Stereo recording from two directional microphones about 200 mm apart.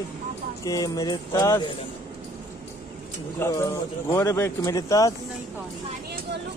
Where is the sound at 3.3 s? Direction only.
15° left (ahead or behind).